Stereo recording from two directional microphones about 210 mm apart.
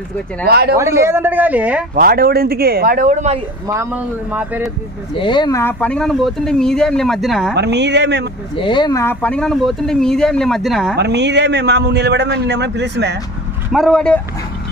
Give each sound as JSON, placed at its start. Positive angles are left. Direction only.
{"t": 0.5, "sound": "speech", "side_deg": -50}
{"t": 0.7, "sound": "speech", "side_deg": -15}
{"t": 2.0, "sound": "speech", "side_deg": -45}
{"t": 3.6, "sound": "speech", "side_deg": -10}
{"t": 5.1, "sound": "speech", "side_deg": 20}
{"t": 7.5, "sound": "a man's voice", "side_deg": -55}
{"t": 8.5, "sound": "speech", "side_deg": 20}
{"t": 11.0, "sound": "a man's voice", "side_deg": -55}
{"t": 13.7, "sound": "speech", "side_deg": 0}